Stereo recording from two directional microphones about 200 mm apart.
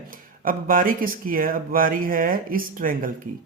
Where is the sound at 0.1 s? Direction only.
45° right (ahead or behind).